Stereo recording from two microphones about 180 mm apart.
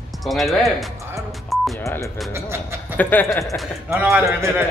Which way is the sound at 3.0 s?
10° left (ahead or behind).